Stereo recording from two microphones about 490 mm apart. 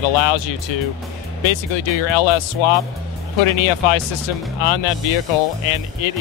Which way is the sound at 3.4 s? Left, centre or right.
Left.